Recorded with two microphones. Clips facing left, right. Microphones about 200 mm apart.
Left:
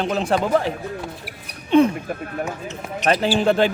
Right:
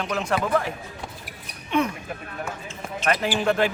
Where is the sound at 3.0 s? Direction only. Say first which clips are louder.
Left 5 dB; 30° left (ahead or behind).